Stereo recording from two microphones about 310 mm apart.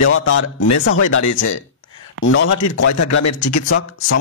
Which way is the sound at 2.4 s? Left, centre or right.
Left.